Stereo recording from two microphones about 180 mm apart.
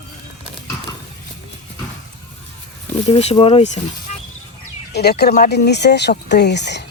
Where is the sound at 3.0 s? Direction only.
35° left (ahead or behind).